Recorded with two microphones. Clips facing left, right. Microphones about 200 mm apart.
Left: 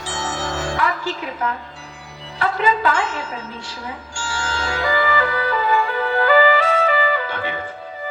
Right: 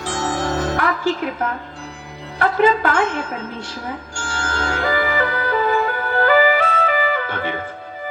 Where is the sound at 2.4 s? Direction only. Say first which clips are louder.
Right 3 dB; 50° right (ahead or behind).